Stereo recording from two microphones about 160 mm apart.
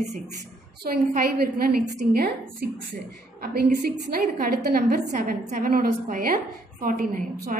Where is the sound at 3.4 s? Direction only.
70° right (ahead or behind).